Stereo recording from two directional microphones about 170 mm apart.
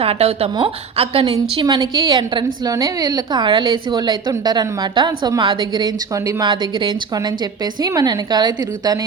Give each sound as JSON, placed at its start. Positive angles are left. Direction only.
{"t": 0.0, "sound": "a woman's voice", "side_deg": -35}